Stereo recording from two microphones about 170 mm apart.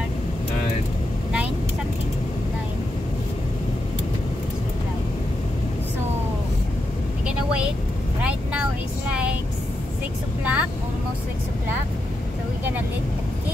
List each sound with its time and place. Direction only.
7.2 s vehicle: 5° right (ahead or behind)
10.4 s vehicle: 10° right (ahead or behind)